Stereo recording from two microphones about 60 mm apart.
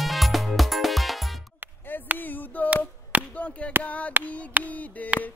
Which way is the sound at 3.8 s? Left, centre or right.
Left.